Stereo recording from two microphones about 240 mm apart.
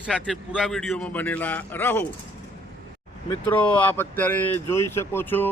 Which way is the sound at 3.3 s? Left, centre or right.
Centre.